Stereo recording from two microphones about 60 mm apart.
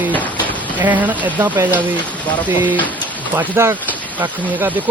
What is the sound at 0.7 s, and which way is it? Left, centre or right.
Speech, right.